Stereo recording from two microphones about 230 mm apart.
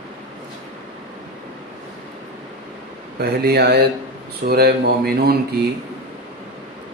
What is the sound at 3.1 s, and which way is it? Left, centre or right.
Speech, right.